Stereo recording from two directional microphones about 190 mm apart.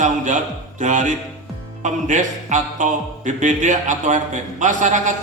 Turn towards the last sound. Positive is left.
turn(degrees=-40)  # may be behind; listen again after turning